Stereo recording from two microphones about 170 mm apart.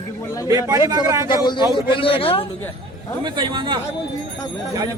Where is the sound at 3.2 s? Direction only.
25° right (ahead or behind).